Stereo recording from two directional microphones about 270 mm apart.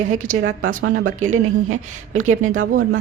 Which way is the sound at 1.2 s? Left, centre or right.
Right.